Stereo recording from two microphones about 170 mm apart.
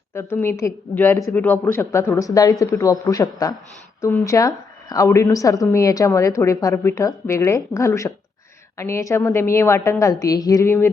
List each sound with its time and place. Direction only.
0.1 s a woman's voice: 15° left (ahead or behind)